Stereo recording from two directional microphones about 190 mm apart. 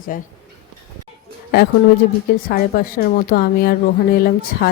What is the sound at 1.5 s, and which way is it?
A woman's voice, 55° left (ahead or behind).